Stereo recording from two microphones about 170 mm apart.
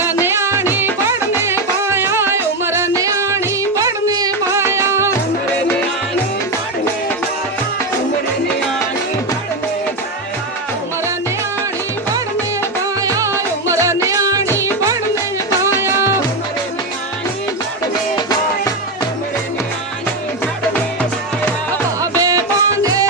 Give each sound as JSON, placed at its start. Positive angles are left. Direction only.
{"t": 0.0, "sound": "music", "side_deg": -10}
{"t": 13.0, "sound": "music", "side_deg": -20}
{"t": 14.4, "sound": "music", "side_deg": 15}
{"t": 15.8, "sound": "music", "side_deg": -15}
{"t": 22.2, "sound": "music", "side_deg": -20}